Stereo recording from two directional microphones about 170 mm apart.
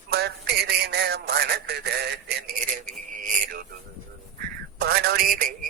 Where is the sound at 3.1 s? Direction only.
50° right (ahead or behind).